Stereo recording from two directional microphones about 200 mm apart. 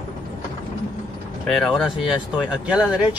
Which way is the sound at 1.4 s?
Centre (ahead or behind).